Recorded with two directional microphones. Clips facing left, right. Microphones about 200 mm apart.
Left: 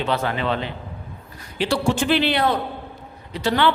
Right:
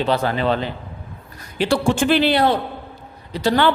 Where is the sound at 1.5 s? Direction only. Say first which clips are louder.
Right 3 dB; 50° right (ahead or behind).